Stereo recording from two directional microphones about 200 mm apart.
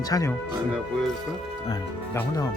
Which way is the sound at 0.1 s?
15° left (ahead or behind).